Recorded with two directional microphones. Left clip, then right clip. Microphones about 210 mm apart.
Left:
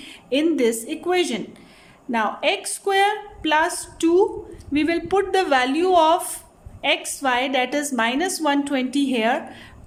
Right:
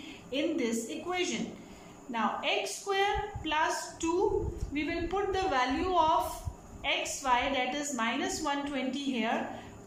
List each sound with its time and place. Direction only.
0.0 s a woman's voice: 50° left (ahead or behind)